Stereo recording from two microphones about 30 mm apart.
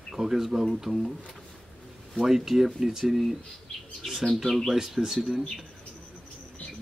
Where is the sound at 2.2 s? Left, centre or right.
Centre.